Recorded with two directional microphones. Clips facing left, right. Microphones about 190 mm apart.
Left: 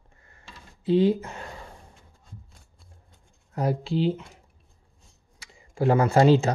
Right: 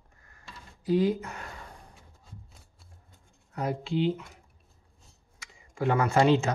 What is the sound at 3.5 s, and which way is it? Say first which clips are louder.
Speech: left 4 dB; 35° left (ahead or behind).